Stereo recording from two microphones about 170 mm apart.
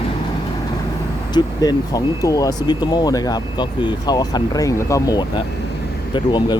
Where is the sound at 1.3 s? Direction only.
20° left (ahead or behind).